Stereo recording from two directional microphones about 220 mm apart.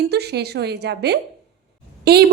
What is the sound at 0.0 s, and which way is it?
A woman's voice, 50° right (ahead or behind).